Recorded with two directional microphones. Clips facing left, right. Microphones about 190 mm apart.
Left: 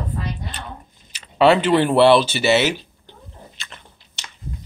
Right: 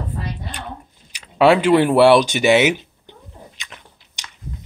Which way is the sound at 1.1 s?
10° right (ahead or behind).